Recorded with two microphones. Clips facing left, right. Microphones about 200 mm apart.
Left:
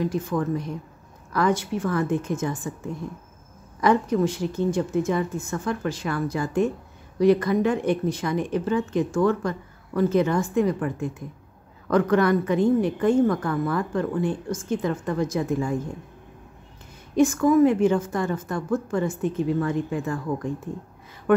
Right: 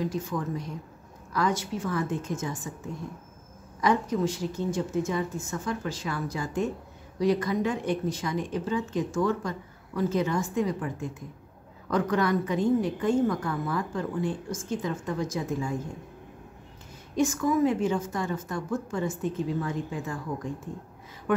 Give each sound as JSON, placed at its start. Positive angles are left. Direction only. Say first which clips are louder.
{"t": 0.1, "sound": "speech", "louder": "left 6 dB", "side_deg": 60}
{"t": 3.8, "sound": "speech", "louder": "left 5 dB", "side_deg": 60}
{"t": 17.1, "sound": "speech", "louder": "left 7 dB", "side_deg": 60}
{"t": 21.3, "sound": "speech", "louder": "left 7 dB", "side_deg": 60}